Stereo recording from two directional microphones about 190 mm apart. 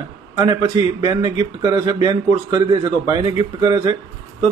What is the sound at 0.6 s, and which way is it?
Speech, 20° right (ahead or behind).